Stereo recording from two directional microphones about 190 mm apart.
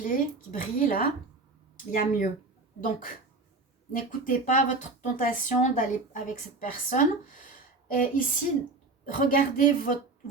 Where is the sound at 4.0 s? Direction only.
45° left (ahead or behind).